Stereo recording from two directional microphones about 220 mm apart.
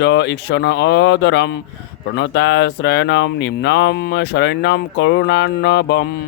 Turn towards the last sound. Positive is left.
turn(degrees=50)  # may be behind; listen again after turning